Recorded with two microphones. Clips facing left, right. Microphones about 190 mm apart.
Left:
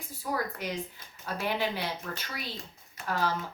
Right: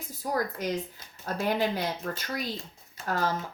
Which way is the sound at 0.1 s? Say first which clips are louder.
Right 3 dB; 40° right (ahead or behind).